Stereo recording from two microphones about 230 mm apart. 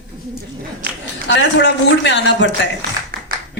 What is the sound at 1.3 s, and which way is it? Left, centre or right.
A man's voice, left.